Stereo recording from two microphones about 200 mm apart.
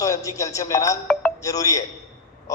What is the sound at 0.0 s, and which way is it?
A man's voice, 15° left (ahead or behind).